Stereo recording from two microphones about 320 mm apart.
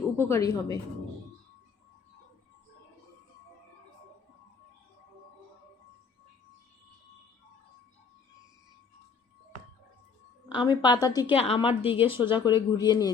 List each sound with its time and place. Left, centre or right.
0.2 s speech: centre
10.5 s speech: centre